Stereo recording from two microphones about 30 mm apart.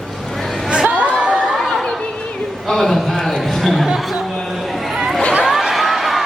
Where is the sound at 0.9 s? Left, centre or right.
Right.